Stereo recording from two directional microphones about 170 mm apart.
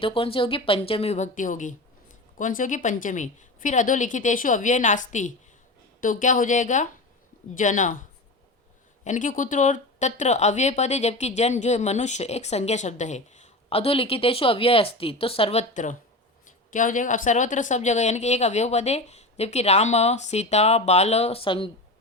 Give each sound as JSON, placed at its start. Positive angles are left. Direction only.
{"t": 0.0, "sound": "a woman's voice", "side_deg": 30}
{"t": 9.0, "sound": "speech", "side_deg": 50}
{"t": 15.7, "sound": "a woman's voice", "side_deg": 50}